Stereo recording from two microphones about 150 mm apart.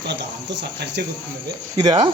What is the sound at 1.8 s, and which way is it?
Speech, 25° right (ahead or behind).